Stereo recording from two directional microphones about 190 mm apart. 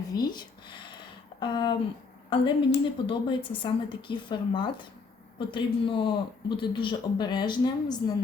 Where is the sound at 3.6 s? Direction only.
25° left (ahead or behind).